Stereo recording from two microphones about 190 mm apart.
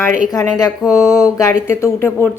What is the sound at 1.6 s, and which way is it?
Speech, 15° left (ahead or behind).